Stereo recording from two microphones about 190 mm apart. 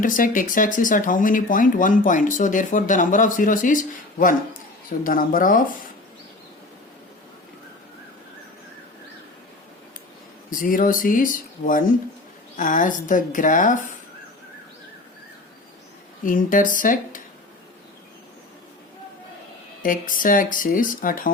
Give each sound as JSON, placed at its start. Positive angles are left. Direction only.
{"t": 0.0, "sound": "speech", "side_deg": 45}
{"t": 4.9, "sound": "speech", "side_deg": 45}
{"t": 10.5, "sound": "speech", "side_deg": 45}
{"t": 16.2, "sound": "speech", "side_deg": 45}
{"t": 19.8, "sound": "speech", "side_deg": 45}